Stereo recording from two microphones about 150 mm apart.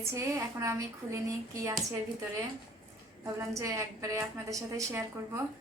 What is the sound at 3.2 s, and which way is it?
A woman's voice, 20° right (ahead or behind).